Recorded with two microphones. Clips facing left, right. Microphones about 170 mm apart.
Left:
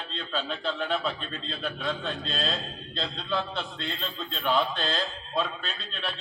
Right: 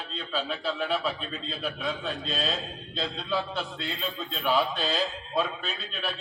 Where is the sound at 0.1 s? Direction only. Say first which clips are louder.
Right 1 dB; 5° right (ahead or behind).